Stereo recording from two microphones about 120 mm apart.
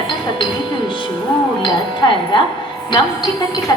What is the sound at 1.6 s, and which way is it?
Speech, 40° left (ahead or behind).